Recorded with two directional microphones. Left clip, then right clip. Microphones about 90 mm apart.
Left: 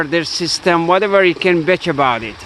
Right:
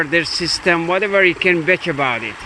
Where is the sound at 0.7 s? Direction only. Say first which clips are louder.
Left 6 dB; 60° left (ahead or behind).